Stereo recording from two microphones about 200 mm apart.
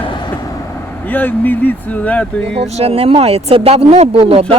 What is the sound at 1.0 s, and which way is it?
Speech, 10° left (ahead or behind).